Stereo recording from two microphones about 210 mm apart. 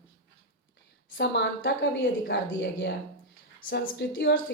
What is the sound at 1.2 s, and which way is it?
Speech, 55° left (ahead or behind).